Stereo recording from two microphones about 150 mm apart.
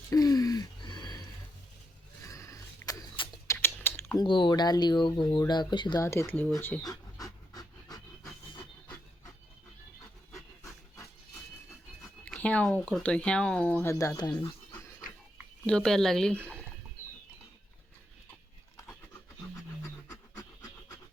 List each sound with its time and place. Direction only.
0.1 s a sound: 25° left (ahead or behind)
3.4 s typing: 15° left (ahead or behind)
4.2 s speech: 30° left (ahead or behind); by 6.8 s 15° left (ahead or behind)
6.8 s pant: 25° left (ahead or behind)
12.2 s speech: 10° left (ahead or behind); by 14.5 s 25° left (ahead or behind)
15.6 s speech: 5° left (ahead or behind)
19.8 s pant: 25° left (ahead or behind)